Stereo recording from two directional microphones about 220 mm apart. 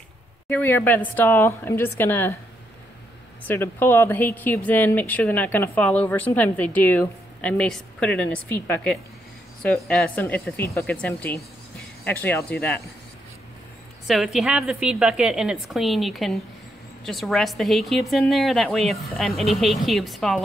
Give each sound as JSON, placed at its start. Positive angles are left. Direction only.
{"t": 0.5, "sound": "speech", "side_deg": 10}
{"t": 3.4, "sound": "speech", "side_deg": 10}
{"t": 14.0, "sound": "a woman's voice", "side_deg": 0}